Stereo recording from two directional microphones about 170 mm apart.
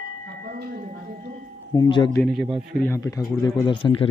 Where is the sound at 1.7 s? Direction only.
25° left (ahead or behind).